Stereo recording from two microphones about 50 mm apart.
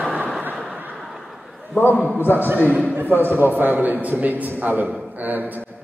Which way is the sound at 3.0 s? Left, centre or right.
Right.